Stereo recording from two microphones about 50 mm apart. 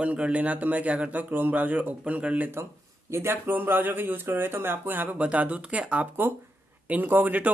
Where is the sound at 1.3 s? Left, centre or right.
Right.